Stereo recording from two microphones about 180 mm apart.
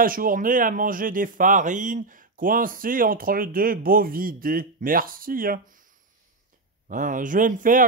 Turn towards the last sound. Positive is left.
turn(degrees=-50)  # may be behind; listen again after turning